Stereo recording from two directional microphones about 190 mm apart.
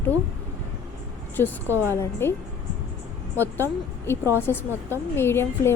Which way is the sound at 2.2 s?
10° left (ahead or behind).